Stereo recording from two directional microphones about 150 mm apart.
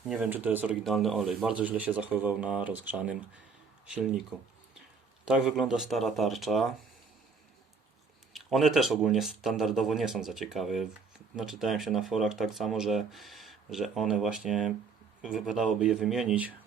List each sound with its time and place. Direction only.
0.1 s speech: 10° right (ahead or behind)
5.2 s speech: 5° right (ahead or behind)
8.3 s speech: centre (ahead or behind)